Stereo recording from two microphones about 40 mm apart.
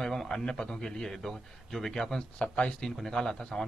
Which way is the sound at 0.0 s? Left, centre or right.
Centre.